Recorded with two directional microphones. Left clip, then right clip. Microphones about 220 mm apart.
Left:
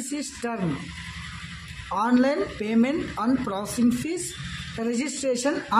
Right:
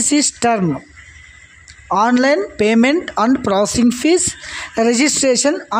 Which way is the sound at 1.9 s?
35° right (ahead or behind).